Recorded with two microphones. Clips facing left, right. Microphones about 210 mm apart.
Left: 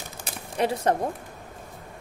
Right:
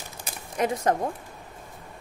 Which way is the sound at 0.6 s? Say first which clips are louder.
Left 1 dB; 30° left (ahead or behind).